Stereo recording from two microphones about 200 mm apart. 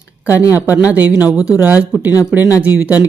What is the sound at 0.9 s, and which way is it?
Speech, 5° right (ahead or behind).